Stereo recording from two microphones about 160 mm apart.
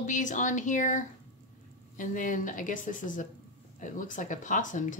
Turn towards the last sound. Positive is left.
turn(degrees=50)  # may be behind; listen again after turning